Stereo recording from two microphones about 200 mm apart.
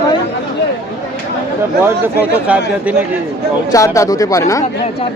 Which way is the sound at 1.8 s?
10° right (ahead or behind).